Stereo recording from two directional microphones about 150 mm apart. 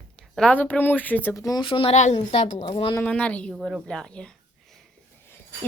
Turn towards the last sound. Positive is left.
turn(degrees=5)  # may be behind; listen again after turning